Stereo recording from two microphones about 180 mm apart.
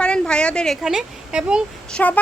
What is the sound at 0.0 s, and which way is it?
Speech, 5° left (ahead or behind).